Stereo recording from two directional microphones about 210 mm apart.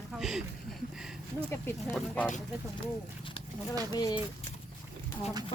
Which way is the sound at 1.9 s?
5° left (ahead or behind).